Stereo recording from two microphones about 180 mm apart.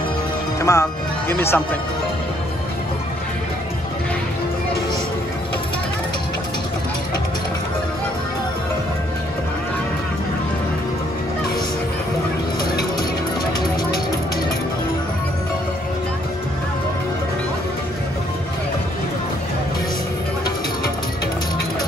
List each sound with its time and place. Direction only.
0.6 s music: 15° left (ahead or behind)
1.3 s speech: 10° left (ahead or behind)